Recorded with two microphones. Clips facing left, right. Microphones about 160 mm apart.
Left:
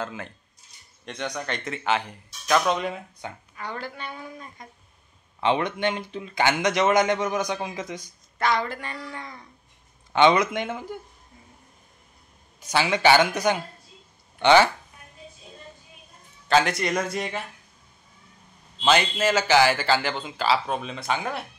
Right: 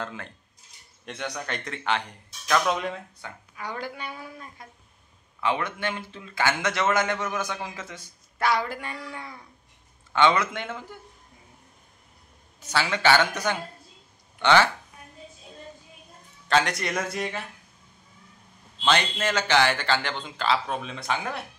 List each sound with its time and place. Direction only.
0.0 s a man's voice: 5° left (ahead or behind)
3.2 s speech: 20° left (ahead or behind)
3.5 s a woman's voice: 10° right (ahead or behind)
5.4 s a man's voice: 20° left (ahead or behind)
8.4 s a woman's voice: 10° right (ahead or behind)
10.1 s a man's voice: 15° left (ahead or behind)
12.5 s a man's voice: 10° left (ahead or behind)
16.4 s a man's voice: centre (ahead or behind)
18.8 s a man's voice: 5° left (ahead or behind)